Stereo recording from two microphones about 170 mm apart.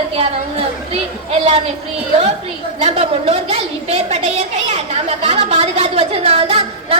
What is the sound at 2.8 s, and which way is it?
A woman's voice, 35° right (ahead or behind).